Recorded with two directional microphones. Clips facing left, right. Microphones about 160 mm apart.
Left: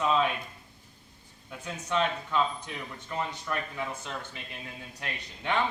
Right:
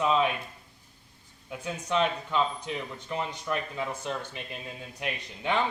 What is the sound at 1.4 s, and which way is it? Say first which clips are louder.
Speech: right 3 dB; 15° right (ahead or behind).